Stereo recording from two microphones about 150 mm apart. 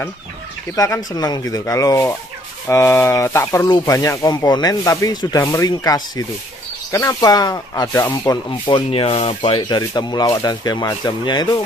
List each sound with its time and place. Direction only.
0.7 s speech: 20° left (ahead or behind)
8.5 s speech: 35° left (ahead or behind)